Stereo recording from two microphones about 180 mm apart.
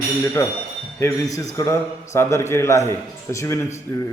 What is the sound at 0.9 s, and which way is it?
A man's voice, 15° left (ahead or behind).